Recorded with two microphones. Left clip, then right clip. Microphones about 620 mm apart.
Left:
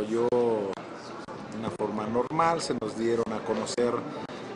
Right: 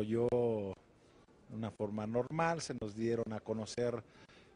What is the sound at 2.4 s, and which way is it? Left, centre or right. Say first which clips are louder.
Speech: left 10 dB; right.